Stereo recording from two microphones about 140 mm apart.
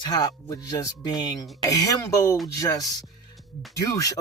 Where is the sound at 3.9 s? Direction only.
25° left (ahead or behind).